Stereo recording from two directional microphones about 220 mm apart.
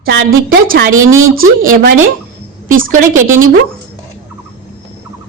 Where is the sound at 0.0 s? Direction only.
50° right (ahead or behind).